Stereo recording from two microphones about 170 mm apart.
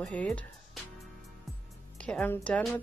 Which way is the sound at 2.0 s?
5° left (ahead or behind).